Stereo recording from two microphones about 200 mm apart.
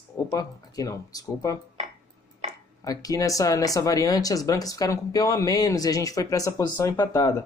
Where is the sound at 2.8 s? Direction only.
20° left (ahead or behind).